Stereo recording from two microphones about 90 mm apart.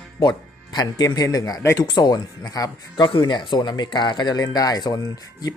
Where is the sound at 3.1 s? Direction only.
60° left (ahead or behind); by 5.5 s 45° left (ahead or behind).